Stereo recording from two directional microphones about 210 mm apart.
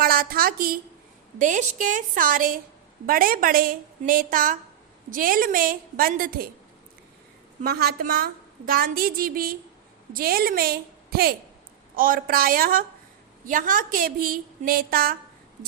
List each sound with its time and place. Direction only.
0.0 s a woman's voice: 45° right (ahead or behind)
7.6 s a woman's voice: 50° right (ahead or behind)